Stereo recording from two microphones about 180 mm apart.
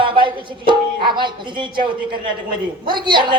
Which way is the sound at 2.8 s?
25° right (ahead or behind).